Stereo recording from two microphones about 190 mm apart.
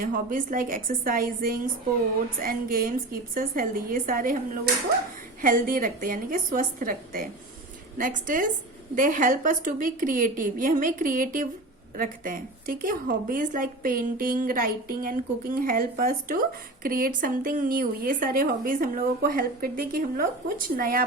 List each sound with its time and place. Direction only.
0.0 s a woman's voice: 45° right (ahead or behind)